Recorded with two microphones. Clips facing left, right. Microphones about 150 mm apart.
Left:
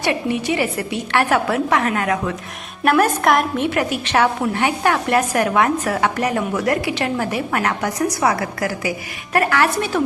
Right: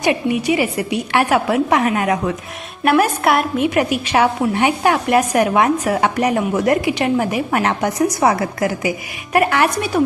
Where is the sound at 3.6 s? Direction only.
15° right (ahead or behind).